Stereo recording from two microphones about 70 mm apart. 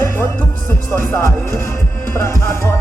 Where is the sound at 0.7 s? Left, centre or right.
Left.